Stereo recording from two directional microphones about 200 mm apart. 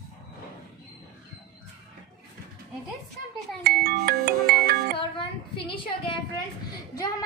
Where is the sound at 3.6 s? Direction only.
50° right (ahead or behind).